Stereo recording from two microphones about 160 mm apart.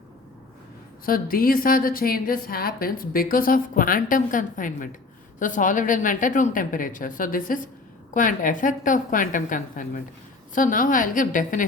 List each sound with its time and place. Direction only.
1.0 s a woman's voice: 60° left (ahead or behind)